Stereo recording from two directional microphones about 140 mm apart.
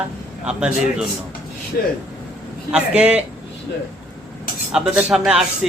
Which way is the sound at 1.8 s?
90° left.